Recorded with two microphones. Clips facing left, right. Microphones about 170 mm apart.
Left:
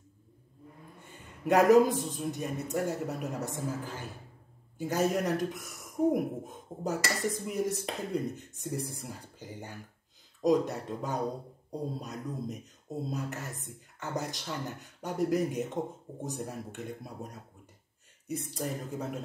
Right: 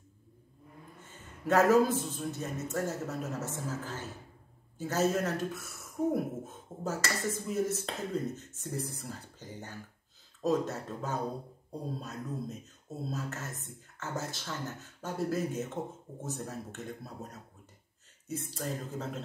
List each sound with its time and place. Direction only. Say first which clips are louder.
1.4 s speech: left 3 dB; 15° left (ahead or behind)